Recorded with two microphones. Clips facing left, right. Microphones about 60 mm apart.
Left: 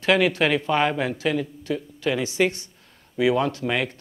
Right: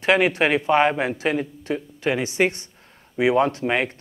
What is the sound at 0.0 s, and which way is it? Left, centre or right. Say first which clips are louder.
A man's voice: right 1 dB; right.